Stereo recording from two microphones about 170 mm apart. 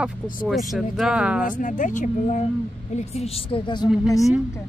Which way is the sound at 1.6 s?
50° left (ahead or behind).